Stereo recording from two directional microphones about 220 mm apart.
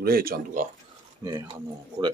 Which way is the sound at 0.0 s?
40° right (ahead or behind).